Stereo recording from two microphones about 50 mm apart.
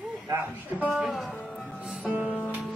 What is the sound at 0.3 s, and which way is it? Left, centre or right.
Speech, right.